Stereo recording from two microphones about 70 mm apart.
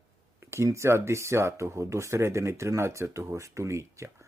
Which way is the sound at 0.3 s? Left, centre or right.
Right.